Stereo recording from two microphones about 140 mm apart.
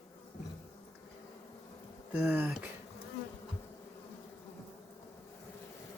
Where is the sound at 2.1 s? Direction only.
10° right (ahead or behind).